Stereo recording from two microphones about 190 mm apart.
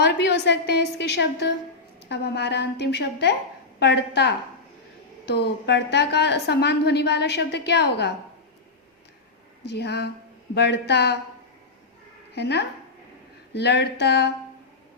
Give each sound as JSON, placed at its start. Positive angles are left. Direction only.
{"t": 0.0, "sound": "a woman's voice", "side_deg": 65}
{"t": 9.6, "sound": "a woman's voice", "side_deg": 60}
{"t": 12.3, "sound": "a woman's voice", "side_deg": 60}